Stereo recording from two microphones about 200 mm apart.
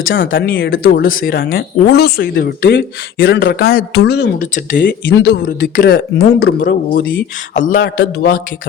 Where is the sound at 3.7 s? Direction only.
50° left (ahead or behind).